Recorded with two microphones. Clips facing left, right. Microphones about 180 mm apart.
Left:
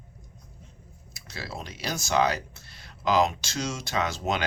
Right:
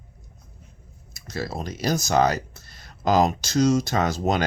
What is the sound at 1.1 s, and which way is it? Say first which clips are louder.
Speech: right 8 dB; 45° right (ahead or behind).